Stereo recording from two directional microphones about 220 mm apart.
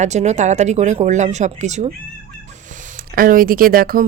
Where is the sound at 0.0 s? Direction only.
30° right (ahead or behind).